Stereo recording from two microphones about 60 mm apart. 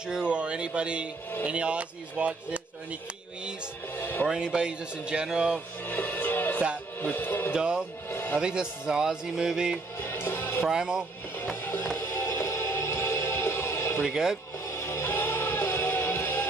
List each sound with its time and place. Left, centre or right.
0.0 s a man's voice: centre
3.9 s music: left
4.3 s a man's voice: centre
5.9 s music: left
7.0 s speech: left
7.5 s a man's voice: centre
8.1 s music: left
8.4 s a man's voice: centre
9.9 s music: left
10.6 s a man's voice: centre
11.6 s music: left
14.0 s a man's voice: centre
14.7 s music: left